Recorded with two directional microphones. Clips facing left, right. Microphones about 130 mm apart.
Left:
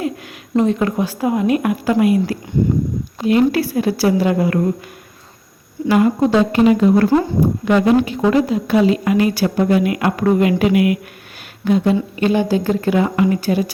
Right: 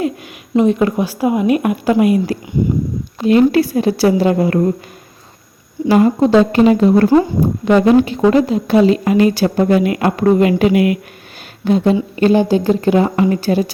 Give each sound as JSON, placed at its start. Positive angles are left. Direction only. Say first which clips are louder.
{"t": 0.5, "sound": "a woman's voice", "louder": "right 3 dB", "side_deg": -15}
{"t": 5.9, "sound": "a woman's voice", "louder": "right 3 dB", "side_deg": -30}